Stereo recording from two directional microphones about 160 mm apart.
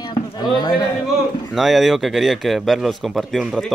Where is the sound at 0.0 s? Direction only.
25° left (ahead or behind).